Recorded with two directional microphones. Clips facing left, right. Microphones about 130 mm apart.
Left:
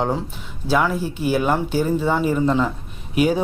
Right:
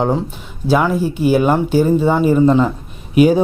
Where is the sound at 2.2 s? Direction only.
40° right (ahead or behind).